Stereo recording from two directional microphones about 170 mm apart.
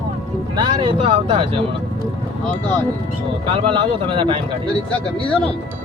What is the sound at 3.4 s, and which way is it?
Speech, 30° right (ahead or behind).